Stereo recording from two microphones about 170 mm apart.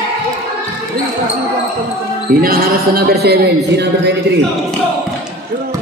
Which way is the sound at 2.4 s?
60° right (ahead or behind).